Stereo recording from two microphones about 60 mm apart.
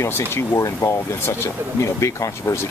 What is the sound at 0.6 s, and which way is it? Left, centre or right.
Speech, left.